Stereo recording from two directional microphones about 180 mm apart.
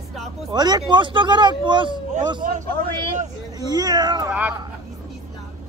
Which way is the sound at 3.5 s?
20° right (ahead or behind).